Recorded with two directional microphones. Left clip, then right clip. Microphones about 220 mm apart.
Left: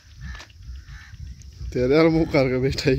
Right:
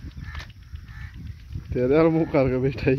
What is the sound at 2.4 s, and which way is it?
Speech, 15° left (ahead or behind).